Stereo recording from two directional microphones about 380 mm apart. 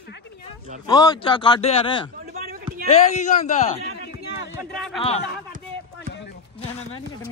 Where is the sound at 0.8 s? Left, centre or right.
Centre.